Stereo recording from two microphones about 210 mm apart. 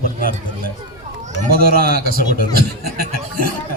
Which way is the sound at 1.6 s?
45° right (ahead or behind).